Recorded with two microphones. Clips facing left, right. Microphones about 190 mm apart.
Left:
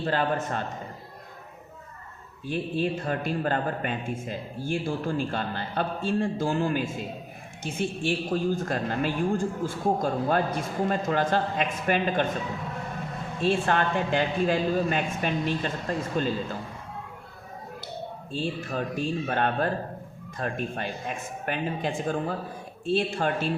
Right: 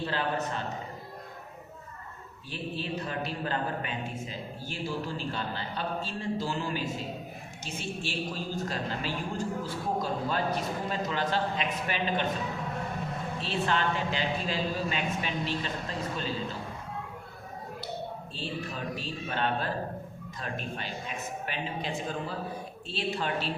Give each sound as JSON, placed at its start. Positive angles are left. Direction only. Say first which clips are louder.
{"t": 0.0, "sound": "a woman's voice", "louder": "left 4 dB", "side_deg": 50}
{"t": 2.5, "sound": "a woman's voice", "louder": "left 8 dB", "side_deg": 50}
{"t": 13.4, "sound": "a woman's voice", "louder": "left 6 dB", "side_deg": 50}
{"t": 18.3, "sound": "a woman's voice", "louder": "left 8 dB", "side_deg": 50}